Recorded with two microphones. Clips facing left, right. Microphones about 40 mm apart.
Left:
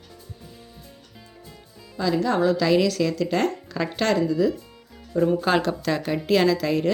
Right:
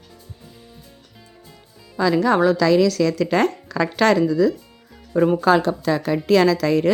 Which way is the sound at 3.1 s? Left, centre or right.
Right.